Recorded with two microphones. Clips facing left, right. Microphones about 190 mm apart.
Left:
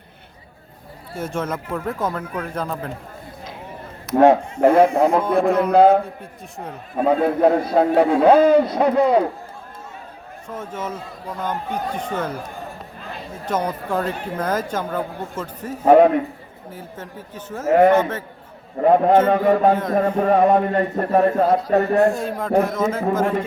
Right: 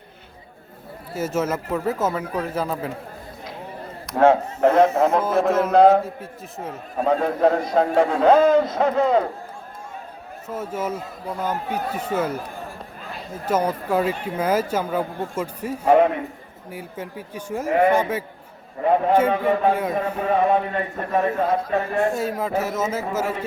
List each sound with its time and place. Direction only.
1.1 s speech: 5° right (ahead or behind)
4.2 s a man's voice: 15° left (ahead or behind)
5.0 s speech: centre (ahead or behind)
7.1 s a man's voice: 10° left (ahead or behind)
10.5 s speech: 10° right (ahead or behind)
13.4 s speech: 10° right (ahead or behind)
15.8 s a man's voice: 45° left (ahead or behind)
16.7 s speech: 10° right (ahead or behind)
18.8 s a man's voice: 45° left (ahead or behind)
22.1 s speech: 5° right (ahead or behind)